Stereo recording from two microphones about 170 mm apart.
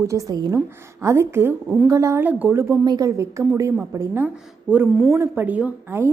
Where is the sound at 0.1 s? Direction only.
20° right (ahead or behind).